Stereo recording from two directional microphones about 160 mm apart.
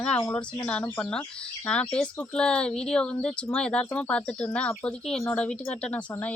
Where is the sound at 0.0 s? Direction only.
5° left (ahead or behind).